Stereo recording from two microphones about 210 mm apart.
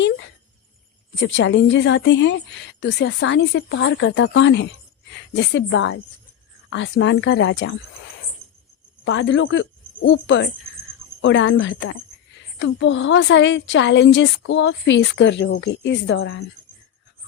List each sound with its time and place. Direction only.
1.2 s a woman's voice: 65° left (ahead or behind)
9.0 s a woman's voice: 65° left (ahead or behind)